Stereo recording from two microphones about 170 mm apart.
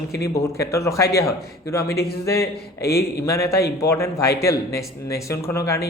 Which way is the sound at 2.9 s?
65° left (ahead or behind).